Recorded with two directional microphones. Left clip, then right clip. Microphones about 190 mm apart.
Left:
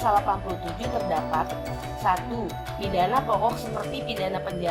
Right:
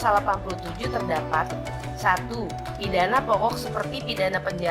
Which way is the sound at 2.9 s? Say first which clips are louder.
Right 2 dB; 15° right (ahead or behind).